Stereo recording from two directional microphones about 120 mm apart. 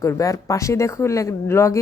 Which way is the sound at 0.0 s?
25° left (ahead or behind).